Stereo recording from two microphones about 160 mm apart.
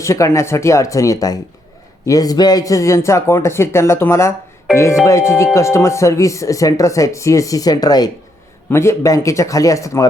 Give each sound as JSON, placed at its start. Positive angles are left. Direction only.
{"t": 0.0, "sound": "a man's voice", "side_deg": 20}